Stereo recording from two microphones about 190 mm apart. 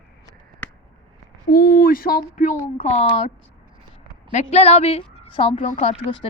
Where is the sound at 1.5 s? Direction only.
55° left (ahead or behind); by 3.1 s 35° left (ahead or behind).